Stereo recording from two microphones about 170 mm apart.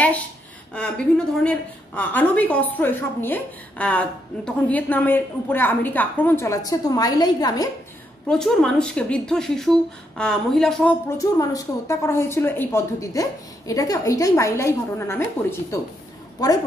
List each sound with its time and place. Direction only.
0.7 s a woman's voice: 5° left (ahead or behind); by 7.7 s 20° left (ahead or behind)
8.3 s speech: 5° left (ahead or behind)
11.1 s a woman's voice: 20° left (ahead or behind)